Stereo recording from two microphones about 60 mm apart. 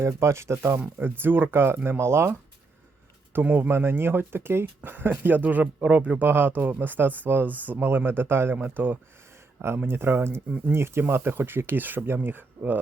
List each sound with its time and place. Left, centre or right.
0.0 s speech: right
3.4 s speech: right
3.7 s speech: right